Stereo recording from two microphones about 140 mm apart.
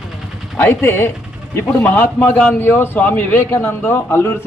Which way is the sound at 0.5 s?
15° left (ahead or behind).